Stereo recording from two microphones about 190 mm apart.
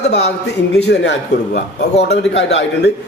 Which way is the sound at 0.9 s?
60° left (ahead or behind).